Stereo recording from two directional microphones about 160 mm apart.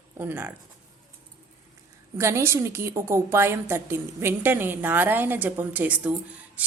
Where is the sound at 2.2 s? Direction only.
15° right (ahead or behind).